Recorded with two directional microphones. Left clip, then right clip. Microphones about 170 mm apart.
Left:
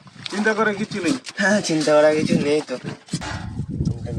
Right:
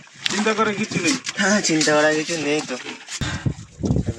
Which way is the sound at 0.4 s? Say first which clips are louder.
Left 2 dB; centre (ahead or behind).